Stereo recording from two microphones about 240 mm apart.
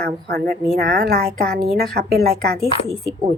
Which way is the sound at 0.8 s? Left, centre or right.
Right.